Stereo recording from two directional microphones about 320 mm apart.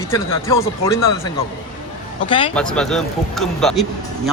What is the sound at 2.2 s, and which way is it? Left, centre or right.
Speech, centre.